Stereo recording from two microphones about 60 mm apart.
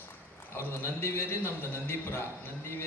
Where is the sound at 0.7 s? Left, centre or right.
Left.